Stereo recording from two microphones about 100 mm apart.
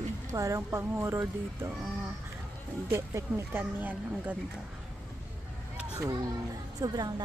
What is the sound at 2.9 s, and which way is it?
Speech, 25° right (ahead or behind).